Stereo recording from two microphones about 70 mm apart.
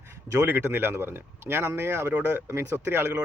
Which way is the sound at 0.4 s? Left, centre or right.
Right.